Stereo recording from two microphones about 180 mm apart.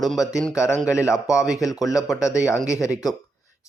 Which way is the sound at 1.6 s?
20° left (ahead or behind).